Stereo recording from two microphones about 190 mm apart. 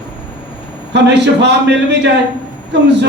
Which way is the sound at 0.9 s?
65° right (ahead or behind).